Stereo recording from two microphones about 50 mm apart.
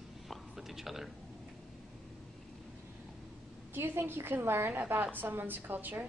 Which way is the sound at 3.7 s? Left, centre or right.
Right.